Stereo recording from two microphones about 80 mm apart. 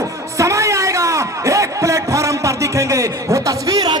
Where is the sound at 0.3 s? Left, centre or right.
Right.